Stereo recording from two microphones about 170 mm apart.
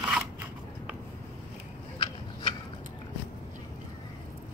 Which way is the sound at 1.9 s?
30° left (ahead or behind).